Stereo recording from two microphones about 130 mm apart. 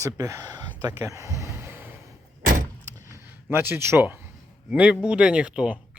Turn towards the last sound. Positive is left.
turn(degrees=-10)  # may be behind; listen again after turning